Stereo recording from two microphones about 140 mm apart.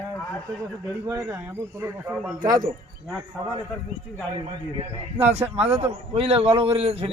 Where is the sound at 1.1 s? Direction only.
20° right (ahead or behind).